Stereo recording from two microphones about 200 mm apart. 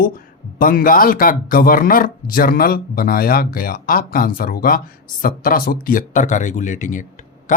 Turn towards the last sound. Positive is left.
turn(degrees=35)  # may be behind; listen again after turning